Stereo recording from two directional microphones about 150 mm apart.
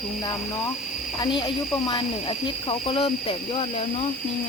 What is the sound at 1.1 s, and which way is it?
Speech, 30° left (ahead or behind).